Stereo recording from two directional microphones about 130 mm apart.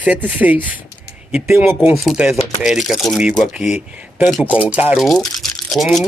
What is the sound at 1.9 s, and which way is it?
Speech, 5° right (ahead or behind).